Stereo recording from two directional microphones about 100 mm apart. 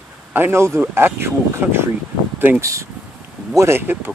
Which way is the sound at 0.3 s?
20° right (ahead or behind).